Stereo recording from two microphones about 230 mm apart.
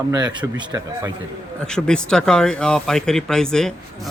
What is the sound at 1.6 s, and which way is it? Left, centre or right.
Speech, centre.